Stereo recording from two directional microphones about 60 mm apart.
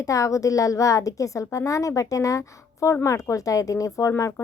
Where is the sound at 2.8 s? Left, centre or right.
Left.